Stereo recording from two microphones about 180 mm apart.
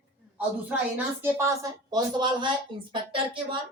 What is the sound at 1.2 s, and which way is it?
Speech, 15° right (ahead or behind).